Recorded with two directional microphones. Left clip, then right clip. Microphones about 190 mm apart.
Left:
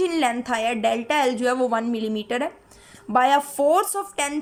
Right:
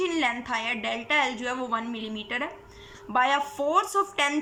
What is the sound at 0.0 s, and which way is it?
A woman's voice, 45° left (ahead or behind).